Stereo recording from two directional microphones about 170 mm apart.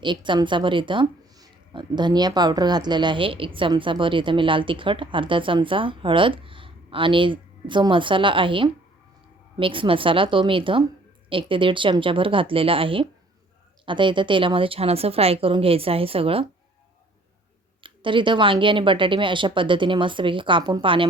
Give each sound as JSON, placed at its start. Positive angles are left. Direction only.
{"t": 0.0, "sound": "a woman's voice", "side_deg": -30}
{"t": 17.8, "sound": "speech", "side_deg": -30}